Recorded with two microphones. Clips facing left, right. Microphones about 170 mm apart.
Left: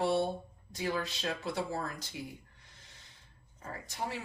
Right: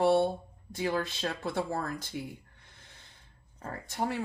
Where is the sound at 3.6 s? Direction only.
55° right (ahead or behind).